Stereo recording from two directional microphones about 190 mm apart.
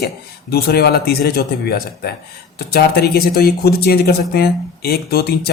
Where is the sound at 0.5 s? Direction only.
55° left (ahead or behind).